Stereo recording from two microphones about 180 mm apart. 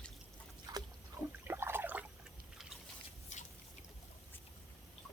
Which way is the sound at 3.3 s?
45° left (ahead or behind).